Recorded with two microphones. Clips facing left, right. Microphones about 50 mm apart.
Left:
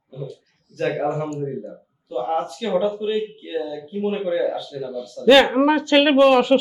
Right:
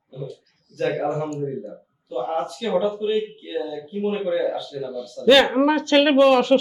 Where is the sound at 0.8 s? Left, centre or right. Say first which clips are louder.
Left 1 dB; centre.